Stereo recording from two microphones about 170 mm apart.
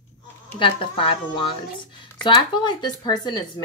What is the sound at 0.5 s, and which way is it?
A woman's voice, 30° left (ahead or behind).